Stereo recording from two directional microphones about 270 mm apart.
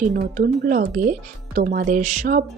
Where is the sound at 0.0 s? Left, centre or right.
Right.